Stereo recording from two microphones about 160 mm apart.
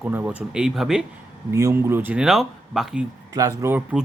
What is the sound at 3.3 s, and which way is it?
Speech, 20° right (ahead or behind).